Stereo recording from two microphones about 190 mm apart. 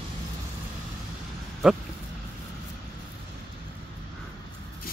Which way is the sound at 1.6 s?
5° right (ahead or behind).